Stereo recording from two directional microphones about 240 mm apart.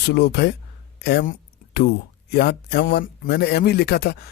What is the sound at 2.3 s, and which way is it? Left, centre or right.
A man's voice, left.